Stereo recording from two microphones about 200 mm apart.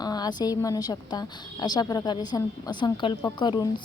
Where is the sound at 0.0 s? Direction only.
20° left (ahead or behind).